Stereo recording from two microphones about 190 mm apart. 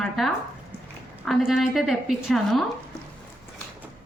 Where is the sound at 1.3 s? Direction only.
Centre (ahead or behind).